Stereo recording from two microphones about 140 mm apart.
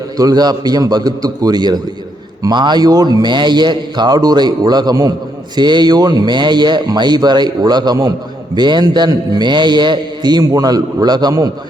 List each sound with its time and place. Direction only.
0.2 s a man's voice: 30° right (ahead or behind)